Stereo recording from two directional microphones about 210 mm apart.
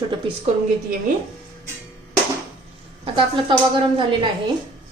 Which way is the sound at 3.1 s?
20° right (ahead or behind).